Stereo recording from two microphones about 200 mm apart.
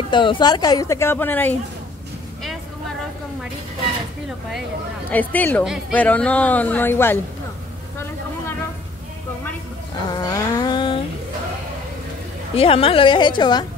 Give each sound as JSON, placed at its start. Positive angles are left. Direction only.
{"t": 0.1, "sound": "speech", "side_deg": 25}
{"t": 5.3, "sound": "speech", "side_deg": 10}
{"t": 10.1, "sound": "a sound", "side_deg": 20}
{"t": 12.5, "sound": "a woman's voice", "side_deg": 30}